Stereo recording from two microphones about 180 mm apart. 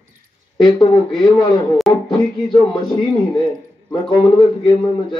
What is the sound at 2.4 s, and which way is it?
Speech, 25° left (ahead or behind).